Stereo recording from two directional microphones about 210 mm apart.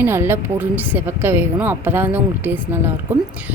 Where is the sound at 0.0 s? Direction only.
10° right (ahead or behind).